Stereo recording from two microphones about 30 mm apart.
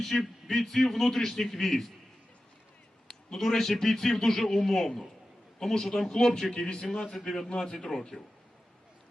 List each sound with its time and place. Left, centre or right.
0.0 s a man's voice: centre
3.3 s a man's voice: centre